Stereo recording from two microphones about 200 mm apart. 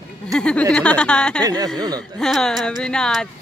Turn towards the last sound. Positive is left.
turn(degrees=5)  # may be behind; listen again after turning